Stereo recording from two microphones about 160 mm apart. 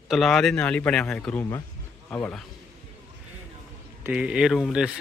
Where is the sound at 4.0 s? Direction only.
10° right (ahead or behind).